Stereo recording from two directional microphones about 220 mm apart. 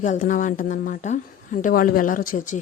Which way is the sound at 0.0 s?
35° left (ahead or behind).